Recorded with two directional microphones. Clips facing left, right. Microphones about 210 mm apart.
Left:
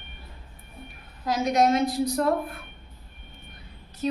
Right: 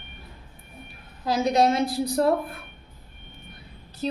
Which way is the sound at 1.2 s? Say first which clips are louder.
Right 1 dB; 30° right (ahead or behind).